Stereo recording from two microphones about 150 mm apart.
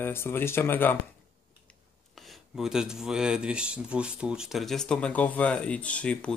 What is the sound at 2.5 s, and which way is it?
Speech, 5° right (ahead or behind).